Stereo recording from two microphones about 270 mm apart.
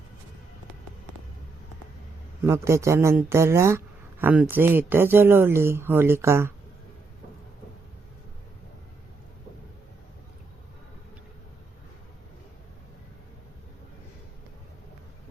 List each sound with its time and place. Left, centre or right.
2.4 s speech: centre